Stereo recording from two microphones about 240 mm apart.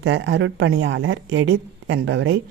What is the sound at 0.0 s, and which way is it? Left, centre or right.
A woman's voice, right.